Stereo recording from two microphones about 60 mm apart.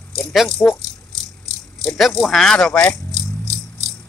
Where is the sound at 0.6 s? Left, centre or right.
Centre.